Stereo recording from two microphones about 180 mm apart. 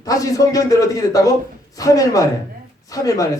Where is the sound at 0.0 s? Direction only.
20° left (ahead or behind).